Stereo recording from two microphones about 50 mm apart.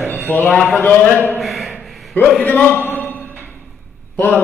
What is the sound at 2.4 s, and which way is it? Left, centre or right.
Speech, left.